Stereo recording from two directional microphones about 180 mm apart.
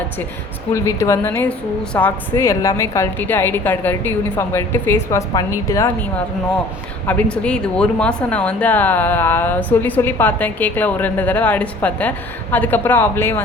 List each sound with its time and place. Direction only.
0.7 s speech: 15° left (ahead or behind)
7.1 s speech: 5° left (ahead or behind)